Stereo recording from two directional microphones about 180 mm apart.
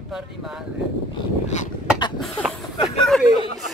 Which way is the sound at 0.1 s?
Centre (ahead or behind).